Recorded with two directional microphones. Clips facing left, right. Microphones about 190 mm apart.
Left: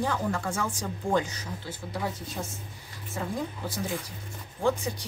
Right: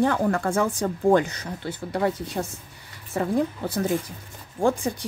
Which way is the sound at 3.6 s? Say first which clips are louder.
Right 8 dB; 60° right (ahead or behind).